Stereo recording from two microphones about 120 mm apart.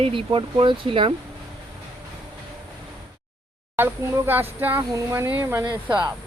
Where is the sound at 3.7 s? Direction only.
20° right (ahead or behind).